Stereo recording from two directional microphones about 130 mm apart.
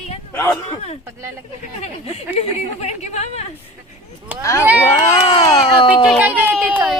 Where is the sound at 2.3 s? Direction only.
55° left (ahead or behind).